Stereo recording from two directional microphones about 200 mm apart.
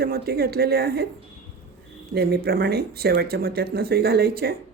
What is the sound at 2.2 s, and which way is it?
Speech, 50° right (ahead or behind).